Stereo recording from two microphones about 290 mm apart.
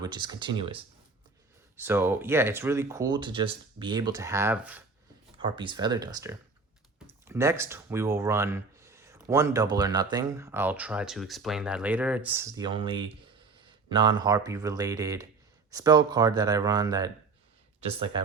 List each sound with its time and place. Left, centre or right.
0.0 s speech: centre
1.7 s speech: centre
5.4 s speech: centre